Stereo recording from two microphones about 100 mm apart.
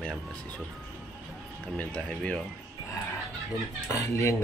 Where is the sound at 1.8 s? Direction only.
15° left (ahead or behind).